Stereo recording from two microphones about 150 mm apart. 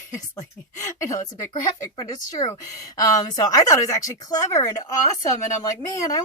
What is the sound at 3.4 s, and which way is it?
Speech, 25° left (ahead or behind).